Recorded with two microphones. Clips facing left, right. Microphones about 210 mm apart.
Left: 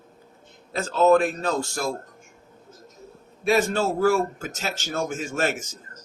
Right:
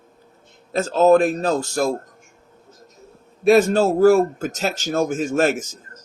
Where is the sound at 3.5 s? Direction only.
40° right (ahead or behind).